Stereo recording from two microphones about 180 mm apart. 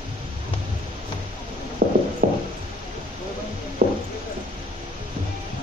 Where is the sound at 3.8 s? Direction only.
55° right (ahead or behind).